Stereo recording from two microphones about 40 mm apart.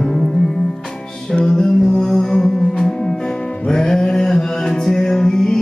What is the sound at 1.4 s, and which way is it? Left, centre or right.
Music, centre.